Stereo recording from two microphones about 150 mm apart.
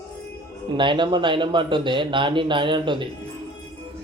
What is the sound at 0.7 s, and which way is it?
Speech, 35° right (ahead or behind).